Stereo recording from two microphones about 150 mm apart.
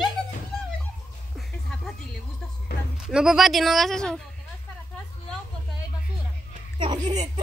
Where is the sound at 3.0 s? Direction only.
5° right (ahead or behind).